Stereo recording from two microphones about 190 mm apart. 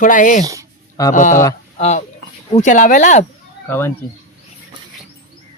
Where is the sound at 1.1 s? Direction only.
40° left (ahead or behind).